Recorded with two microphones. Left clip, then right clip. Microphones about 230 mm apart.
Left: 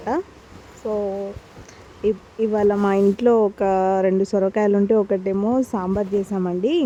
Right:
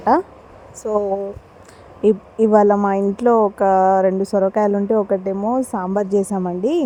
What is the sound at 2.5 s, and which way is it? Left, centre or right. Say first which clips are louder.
Speech: right 4 dB; centre.